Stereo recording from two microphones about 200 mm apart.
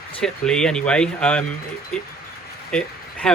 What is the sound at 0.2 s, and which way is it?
Speech, 5° left (ahead or behind).